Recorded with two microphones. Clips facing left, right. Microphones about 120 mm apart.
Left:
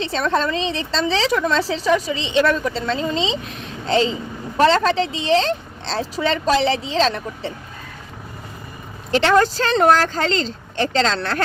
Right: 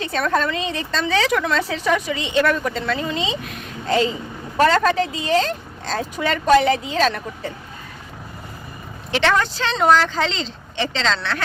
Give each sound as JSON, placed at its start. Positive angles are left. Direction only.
{"t": 0.0, "sound": "a woman's voice", "side_deg": 25}
{"t": 9.1, "sound": "speech", "side_deg": 40}